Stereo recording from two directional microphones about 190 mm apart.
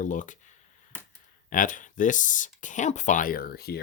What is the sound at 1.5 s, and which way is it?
Speech, 45° left (ahead or behind).